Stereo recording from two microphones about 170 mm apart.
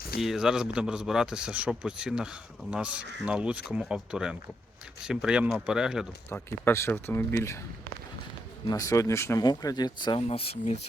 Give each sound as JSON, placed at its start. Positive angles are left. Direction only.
{"t": 0.2, "sound": "a man's voice", "side_deg": 0}
{"t": 6.3, "sound": "speech", "side_deg": 15}
{"t": 8.6, "sound": "speech", "side_deg": 20}